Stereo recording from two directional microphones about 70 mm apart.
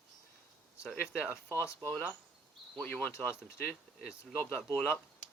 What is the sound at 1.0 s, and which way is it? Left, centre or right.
Speech, left.